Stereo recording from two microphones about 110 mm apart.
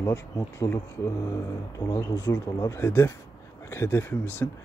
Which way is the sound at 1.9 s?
30° left (ahead or behind).